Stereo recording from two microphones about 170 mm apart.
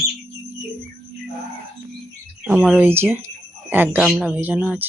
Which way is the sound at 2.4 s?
5° right (ahead or behind).